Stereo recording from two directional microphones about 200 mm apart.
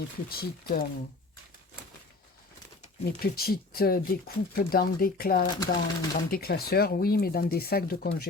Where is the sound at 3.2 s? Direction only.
50° left (ahead or behind).